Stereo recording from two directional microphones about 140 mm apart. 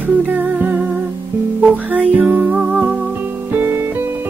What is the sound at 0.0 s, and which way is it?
Music, 10° right (ahead or behind).